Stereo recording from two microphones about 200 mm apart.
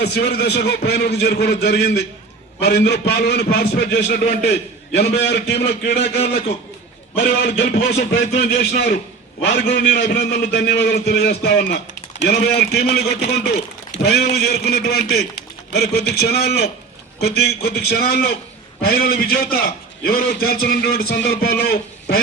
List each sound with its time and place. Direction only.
0.0 s a man's voice: 55° left (ahead or behind)
7.2 s a man's voice: 55° left (ahead or behind)